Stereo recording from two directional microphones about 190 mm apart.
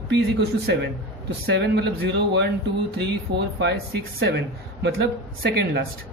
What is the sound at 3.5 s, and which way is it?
Speech, 60° right (ahead or behind).